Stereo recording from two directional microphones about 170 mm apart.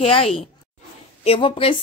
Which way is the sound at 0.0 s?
35° left (ahead or behind).